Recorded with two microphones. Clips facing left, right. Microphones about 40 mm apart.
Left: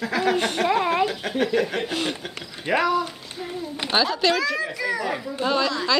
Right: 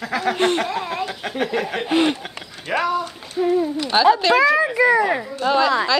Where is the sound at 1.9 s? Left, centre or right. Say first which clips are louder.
Right 9 dB; right.